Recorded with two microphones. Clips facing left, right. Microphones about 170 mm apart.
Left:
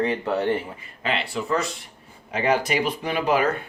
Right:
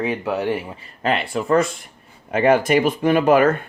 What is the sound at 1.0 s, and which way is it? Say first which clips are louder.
Speech: right 5 dB; 50° right (ahead or behind).